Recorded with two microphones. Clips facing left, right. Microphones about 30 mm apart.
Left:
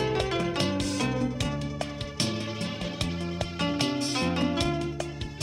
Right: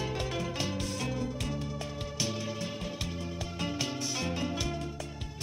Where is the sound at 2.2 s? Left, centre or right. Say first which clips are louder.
Left 4 dB; left.